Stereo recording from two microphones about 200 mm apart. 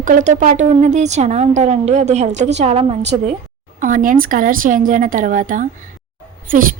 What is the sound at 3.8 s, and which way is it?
A woman's voice, 40° right (ahead or behind).